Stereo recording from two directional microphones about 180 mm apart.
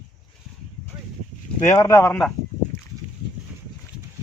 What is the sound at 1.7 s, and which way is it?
Speech, 15° left (ahead or behind).